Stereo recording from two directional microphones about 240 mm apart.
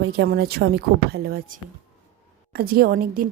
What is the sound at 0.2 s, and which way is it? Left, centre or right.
A woman's voice, right.